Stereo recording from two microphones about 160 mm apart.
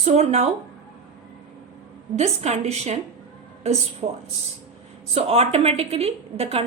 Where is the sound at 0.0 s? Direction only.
40° right (ahead or behind).